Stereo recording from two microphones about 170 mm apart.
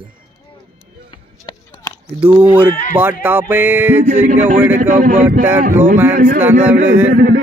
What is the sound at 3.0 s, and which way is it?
Speech, 10° right (ahead or behind).